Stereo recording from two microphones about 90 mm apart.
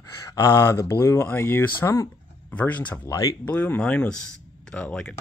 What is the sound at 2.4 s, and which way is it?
Speech, 15° left (ahead or behind).